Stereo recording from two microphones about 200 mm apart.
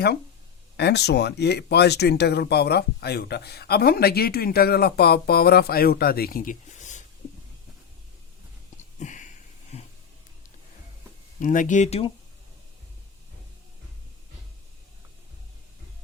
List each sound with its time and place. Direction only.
0.8 s speech: 55° left (ahead or behind); by 7.0 s 35° left (ahead or behind)
8.8 s a sound: 35° left (ahead or behind)
11.3 s speech: 40° left (ahead or behind)